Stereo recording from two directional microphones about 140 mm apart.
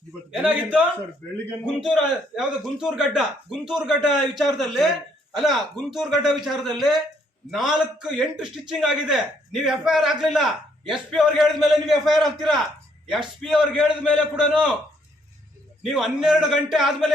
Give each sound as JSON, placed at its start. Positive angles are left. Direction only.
{"t": 0.3, "sound": "a man's voice", "side_deg": -10}
{"t": 15.8, "sound": "a man's voice", "side_deg": 0}